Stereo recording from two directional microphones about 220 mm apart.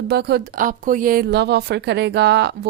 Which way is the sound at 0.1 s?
50° right (ahead or behind).